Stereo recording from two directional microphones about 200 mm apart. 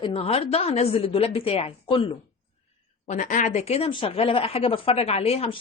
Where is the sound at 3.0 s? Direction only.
40° left (ahead or behind).